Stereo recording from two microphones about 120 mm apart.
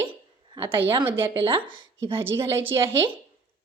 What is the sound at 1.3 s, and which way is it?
Speech, 45° right (ahead or behind).